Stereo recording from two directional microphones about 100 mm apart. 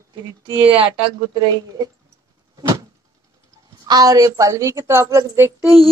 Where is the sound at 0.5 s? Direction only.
65° right (ahead or behind).